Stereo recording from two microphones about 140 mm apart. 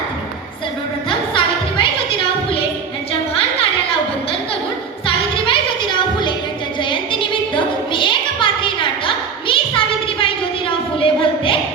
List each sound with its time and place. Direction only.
1.3 s music: 40° left (ahead or behind)
5.0 s music: 35° left (ahead or behind)
6.8 s a sound: 35° left (ahead or behind)